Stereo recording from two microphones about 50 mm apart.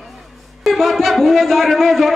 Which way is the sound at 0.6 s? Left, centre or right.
Centre.